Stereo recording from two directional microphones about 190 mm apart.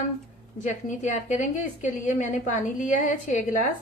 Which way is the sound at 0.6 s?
40° left (ahead or behind).